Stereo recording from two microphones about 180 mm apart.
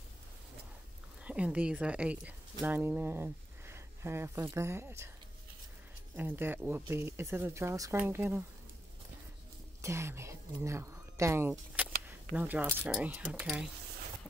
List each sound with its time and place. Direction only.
1.2 s speech: 5° right (ahead or behind)
6.1 s speech: 10° right (ahead or behind)
9.8 s a woman's voice: 15° right (ahead or behind)
11.8 s a sound: 10° right (ahead or behind)
12.6 s speech: 10° right (ahead or behind)